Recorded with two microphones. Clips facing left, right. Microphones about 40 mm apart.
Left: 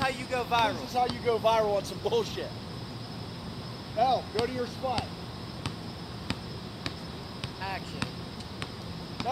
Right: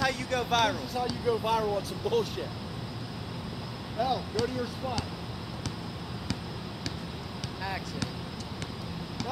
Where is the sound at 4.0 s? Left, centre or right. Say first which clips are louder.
Left 3 dB; centre.